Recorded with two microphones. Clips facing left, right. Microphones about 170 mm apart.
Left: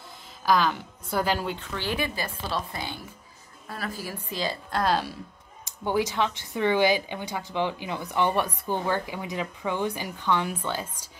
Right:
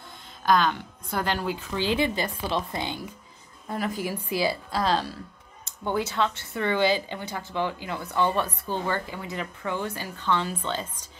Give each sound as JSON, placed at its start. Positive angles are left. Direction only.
{"t": 0.5, "sound": "speech", "side_deg": 5}
{"t": 1.7, "sound": "a woman's voice", "side_deg": -15}
{"t": 4.8, "sound": "speech", "side_deg": 10}